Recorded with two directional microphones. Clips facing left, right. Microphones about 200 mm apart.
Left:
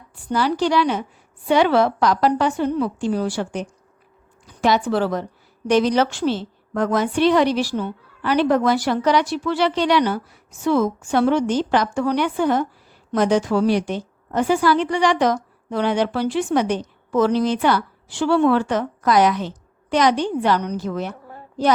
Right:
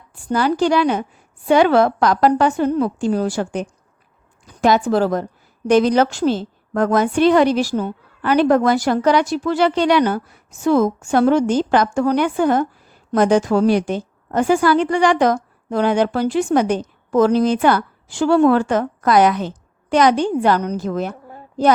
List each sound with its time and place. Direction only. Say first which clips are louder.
0.3 s a woman's voice: right 3 dB; 50° right (ahead or behind)
4.9 s a woman's voice: right 4 dB; 45° right (ahead or behind)